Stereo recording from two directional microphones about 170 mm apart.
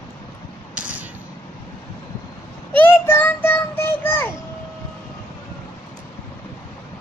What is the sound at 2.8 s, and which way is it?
Child singing, 15° left (ahead or behind).